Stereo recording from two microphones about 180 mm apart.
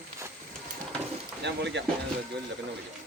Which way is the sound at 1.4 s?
75° right (ahead or behind).